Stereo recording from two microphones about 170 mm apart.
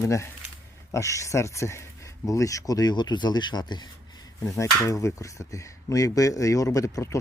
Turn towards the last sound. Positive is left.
turn(degrees=20)  # may be behind; listen again after turning